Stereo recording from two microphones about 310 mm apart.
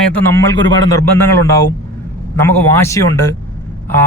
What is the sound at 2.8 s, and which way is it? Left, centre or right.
Speech, centre.